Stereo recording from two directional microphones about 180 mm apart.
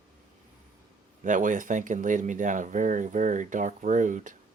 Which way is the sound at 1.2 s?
45° right (ahead or behind).